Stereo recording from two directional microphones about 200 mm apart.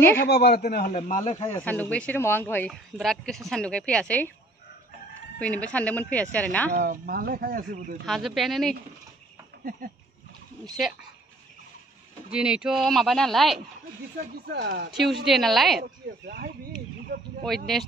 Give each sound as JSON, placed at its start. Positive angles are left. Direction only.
{"t": 0.2, "sound": "speech", "side_deg": 55}
{"t": 0.9, "sound": "speech", "side_deg": 40}
{"t": 1.6, "sound": "a woman's voice", "side_deg": 5}
{"t": 5.4, "sound": "speech", "side_deg": 5}
{"t": 6.7, "sound": "speech", "side_deg": -45}
{"t": 8.0, "sound": "a woman's voice", "side_deg": 0}
{"t": 12.3, "sound": "a woman's voice", "side_deg": -5}
{"t": 14.4, "sound": "speech", "side_deg": -55}
{"t": 14.9, "sound": "a woman's voice", "side_deg": 0}
{"t": 15.8, "sound": "speech", "side_deg": -45}